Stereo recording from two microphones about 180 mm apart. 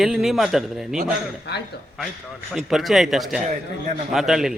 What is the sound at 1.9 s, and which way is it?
A man's voice, centre (ahead or behind).